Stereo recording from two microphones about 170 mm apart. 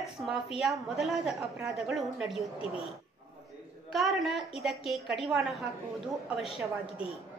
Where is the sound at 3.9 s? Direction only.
Centre (ahead or behind).